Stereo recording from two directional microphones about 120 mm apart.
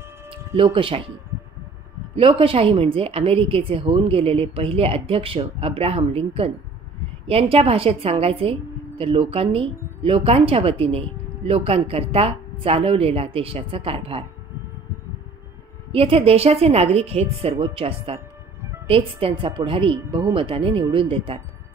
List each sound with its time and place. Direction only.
0.7 s a woman's voice: 50° right (ahead or behind)
2.1 s a woman's voice: 50° right (ahead or behind)
15.9 s a woman's voice: 50° right (ahead or behind)